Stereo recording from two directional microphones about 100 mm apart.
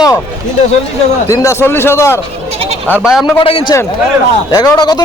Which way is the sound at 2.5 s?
90° right.